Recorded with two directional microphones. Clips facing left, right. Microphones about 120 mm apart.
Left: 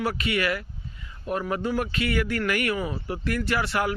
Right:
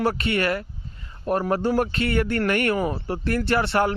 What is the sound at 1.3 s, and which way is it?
Speech, 40° right (ahead or behind).